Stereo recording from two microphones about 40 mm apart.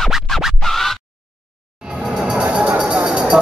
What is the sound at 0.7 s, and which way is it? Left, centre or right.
Scratch, centre.